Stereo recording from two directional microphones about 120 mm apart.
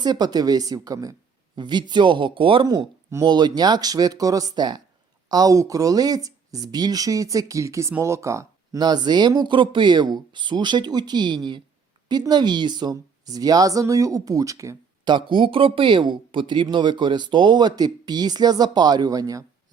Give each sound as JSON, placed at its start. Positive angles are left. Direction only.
{"t": 0.0, "sound": "speech", "side_deg": -35}
{"t": 2.6, "sound": "speech", "side_deg": -30}
{"t": 15.0, "sound": "speech", "side_deg": -40}